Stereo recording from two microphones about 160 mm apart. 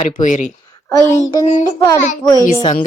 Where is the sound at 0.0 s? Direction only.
55° left (ahead or behind).